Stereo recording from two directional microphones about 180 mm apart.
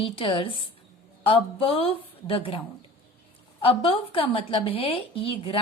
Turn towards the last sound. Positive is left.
turn(degrees=30)  # may be behind; listen again after turning